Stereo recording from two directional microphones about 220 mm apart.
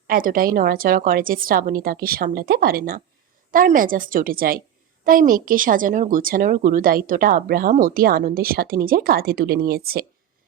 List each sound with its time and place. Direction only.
0.1 s speech: 40° right (ahead or behind)